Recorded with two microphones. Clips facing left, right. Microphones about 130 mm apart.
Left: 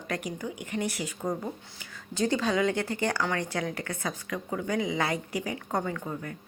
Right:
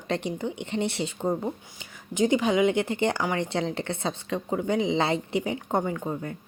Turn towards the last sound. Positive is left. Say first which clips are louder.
# right 4 dB
turn(degrees=-25)  # may be behind; listen again after turning